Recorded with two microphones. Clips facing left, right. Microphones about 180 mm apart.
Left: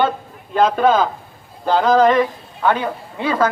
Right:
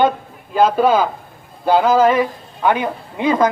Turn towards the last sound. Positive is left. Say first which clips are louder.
# right 3 dB
turn(degrees=-15)  # may be behind; listen again after turning